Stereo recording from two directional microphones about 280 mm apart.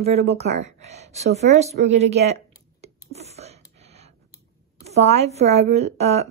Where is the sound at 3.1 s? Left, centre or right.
Right.